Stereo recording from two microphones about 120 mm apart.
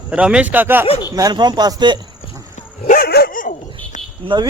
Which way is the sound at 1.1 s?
30° right (ahead or behind).